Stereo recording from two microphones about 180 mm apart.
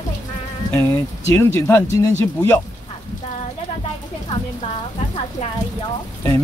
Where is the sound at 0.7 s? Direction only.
15° left (ahead or behind).